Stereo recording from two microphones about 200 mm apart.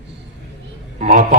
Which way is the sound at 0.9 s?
40° right (ahead or behind).